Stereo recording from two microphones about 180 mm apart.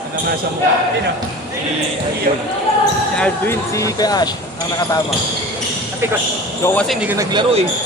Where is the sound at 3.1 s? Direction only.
5° left (ahead or behind).